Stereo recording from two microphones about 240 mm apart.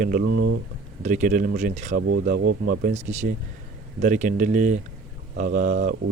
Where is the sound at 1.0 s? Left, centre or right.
Right.